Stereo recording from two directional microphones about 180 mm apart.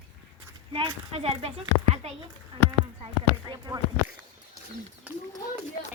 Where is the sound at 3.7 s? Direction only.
25° right (ahead or behind).